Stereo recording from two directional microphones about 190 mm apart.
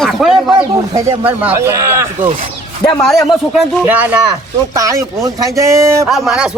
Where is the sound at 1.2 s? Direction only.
10° right (ahead or behind).